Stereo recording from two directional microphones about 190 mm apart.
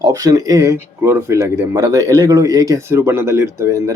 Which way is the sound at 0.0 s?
15° right (ahead or behind).